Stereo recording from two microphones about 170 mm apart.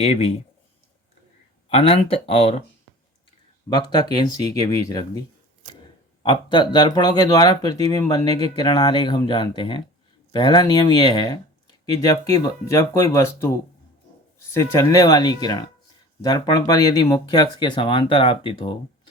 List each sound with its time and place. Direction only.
0.0 s speech: 35° left (ahead or behind)
1.7 s speech: 35° left (ahead or behind)
3.7 s speech: 25° left (ahead or behind)
6.2 s speech: 25° left (ahead or behind)
14.5 s speech: 15° left (ahead or behind)